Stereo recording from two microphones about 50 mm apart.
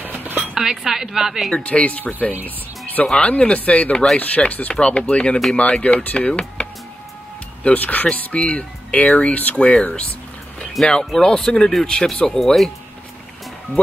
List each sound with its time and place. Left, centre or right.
0.0 s dishes: right
0.6 s a woman's voice: centre
1.5 s speech: left
3.1 s speech: centre
10.8 s speech: centre